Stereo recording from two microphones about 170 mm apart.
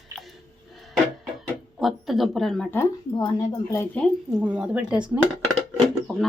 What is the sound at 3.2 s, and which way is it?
Speech, 20° left (ahead or behind).